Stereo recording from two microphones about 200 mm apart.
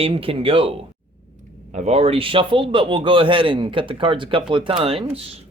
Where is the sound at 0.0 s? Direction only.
30° right (ahead or behind).